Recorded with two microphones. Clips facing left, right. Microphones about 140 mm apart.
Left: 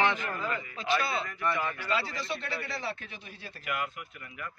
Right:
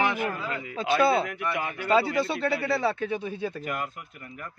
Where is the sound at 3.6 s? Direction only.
40° right (ahead or behind).